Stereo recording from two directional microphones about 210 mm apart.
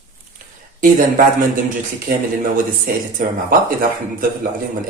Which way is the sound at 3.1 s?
40° right (ahead or behind).